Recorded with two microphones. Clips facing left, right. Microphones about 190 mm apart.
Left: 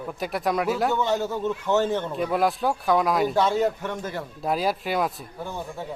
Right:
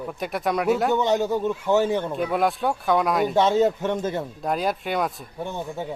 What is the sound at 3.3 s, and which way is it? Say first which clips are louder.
Speech: right 3 dB; 20° right (ahead or behind).